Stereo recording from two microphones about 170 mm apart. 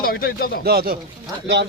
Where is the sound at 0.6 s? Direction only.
65° right (ahead or behind).